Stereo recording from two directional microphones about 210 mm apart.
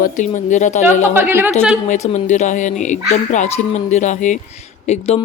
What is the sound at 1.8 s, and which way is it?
Speech, 35° left (ahead or behind).